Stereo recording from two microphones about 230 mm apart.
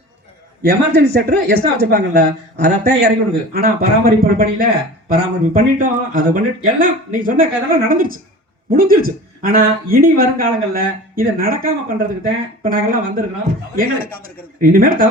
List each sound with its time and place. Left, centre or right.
0.6 s speech: right